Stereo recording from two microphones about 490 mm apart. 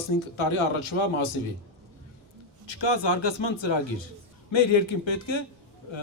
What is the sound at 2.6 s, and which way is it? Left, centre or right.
A man's voice, left.